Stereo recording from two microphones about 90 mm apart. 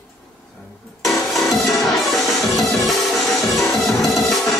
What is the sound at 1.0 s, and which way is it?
Music, centre (ahead or behind).